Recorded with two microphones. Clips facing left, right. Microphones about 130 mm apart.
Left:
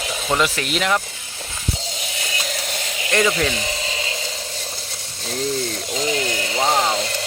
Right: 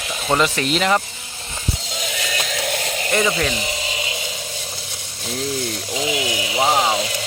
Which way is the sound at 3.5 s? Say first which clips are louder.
Even; 15° right (ahead or behind).